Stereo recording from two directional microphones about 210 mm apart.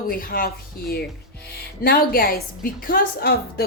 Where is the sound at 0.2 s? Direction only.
45° left (ahead or behind).